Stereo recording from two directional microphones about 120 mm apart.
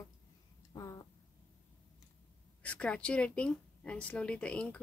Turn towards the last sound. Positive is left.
turn(degrees=10)  # may be behind; listen again after turning